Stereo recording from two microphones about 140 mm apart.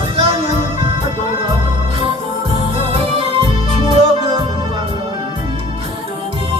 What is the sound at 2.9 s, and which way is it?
Music, 40° right (ahead or behind).